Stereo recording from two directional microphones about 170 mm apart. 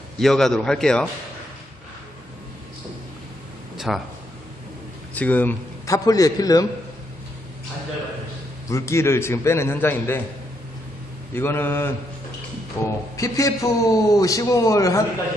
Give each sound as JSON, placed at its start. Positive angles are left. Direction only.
{"t": 0.2, "sound": "a man's voice", "side_deg": 0}
{"t": 3.7, "sound": "a sound", "side_deg": 0}
{"t": 5.1, "sound": "a man's voice", "side_deg": 10}
{"t": 8.6, "sound": "a man's voice", "side_deg": 15}
{"t": 11.3, "sound": "a man's voice", "side_deg": 15}